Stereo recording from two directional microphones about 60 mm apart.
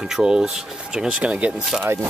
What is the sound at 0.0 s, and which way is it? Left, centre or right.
Speech, centre.